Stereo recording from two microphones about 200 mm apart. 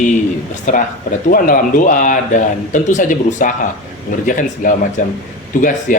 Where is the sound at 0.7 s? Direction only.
40° left (ahead or behind).